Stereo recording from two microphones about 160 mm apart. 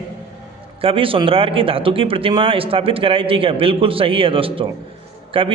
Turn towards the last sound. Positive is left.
turn(degrees=-35)  # may be behind; listen again after turning